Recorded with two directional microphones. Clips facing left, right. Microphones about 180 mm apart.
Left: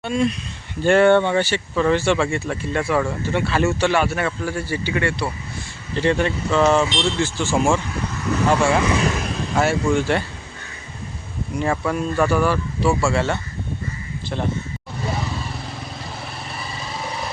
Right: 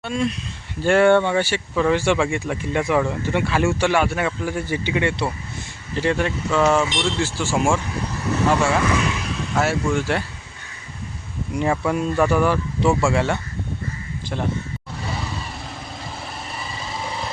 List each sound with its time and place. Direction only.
0.0 s speech: centre (ahead or behind); by 5.3 s 20° right (ahead or behind)
5.9 s speech: 5° right (ahead or behind)
9.0 s speech: 45° left (ahead or behind)
9.6 s speech: 5° right (ahead or behind)
11.6 s speech: 10° right (ahead or behind)
12.5 s speech: 20° right (ahead or behind)